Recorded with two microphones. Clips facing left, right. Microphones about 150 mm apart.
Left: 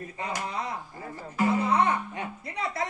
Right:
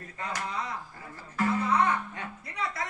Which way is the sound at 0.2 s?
15° left (ahead or behind).